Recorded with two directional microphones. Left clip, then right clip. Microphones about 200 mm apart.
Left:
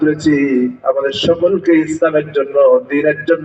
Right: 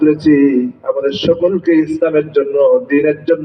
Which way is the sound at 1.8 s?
30° right (ahead or behind).